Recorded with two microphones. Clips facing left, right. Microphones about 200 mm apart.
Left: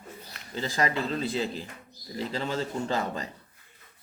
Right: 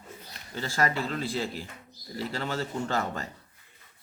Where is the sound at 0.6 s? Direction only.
20° left (ahead or behind).